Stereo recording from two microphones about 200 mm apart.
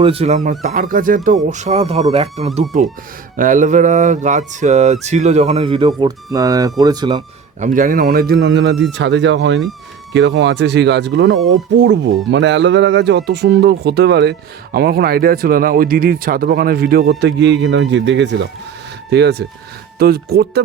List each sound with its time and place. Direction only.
0.0 s music: 30° right (ahead or behind)
7.6 s speech: 40° right (ahead or behind)